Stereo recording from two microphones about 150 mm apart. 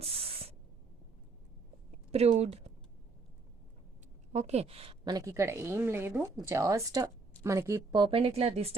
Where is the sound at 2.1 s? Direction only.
45° right (ahead or behind).